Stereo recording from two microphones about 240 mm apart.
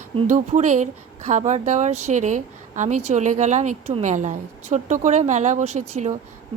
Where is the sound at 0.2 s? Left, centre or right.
Right.